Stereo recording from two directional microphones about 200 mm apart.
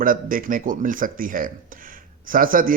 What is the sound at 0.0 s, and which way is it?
A man's voice, 45° right (ahead or behind).